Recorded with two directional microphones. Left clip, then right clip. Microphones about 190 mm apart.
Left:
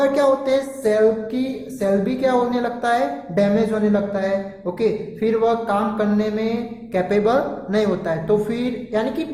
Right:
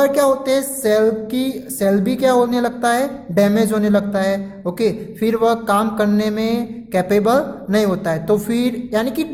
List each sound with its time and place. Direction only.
0.0 s music: 30° right (ahead or behind)